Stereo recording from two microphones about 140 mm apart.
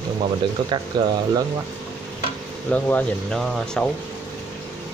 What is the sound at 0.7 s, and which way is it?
Speech, 30° right (ahead or behind).